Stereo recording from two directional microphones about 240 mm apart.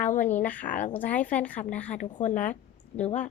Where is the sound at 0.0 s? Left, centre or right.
Left.